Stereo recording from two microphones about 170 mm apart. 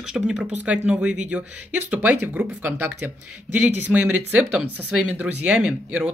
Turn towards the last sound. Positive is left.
turn(degrees=-5)  # may be behind; listen again after turning